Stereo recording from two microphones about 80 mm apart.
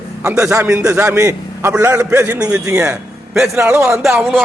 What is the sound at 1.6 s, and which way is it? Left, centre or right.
A man's voice, right.